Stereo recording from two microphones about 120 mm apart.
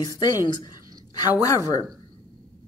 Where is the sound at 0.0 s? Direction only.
35° left (ahead or behind).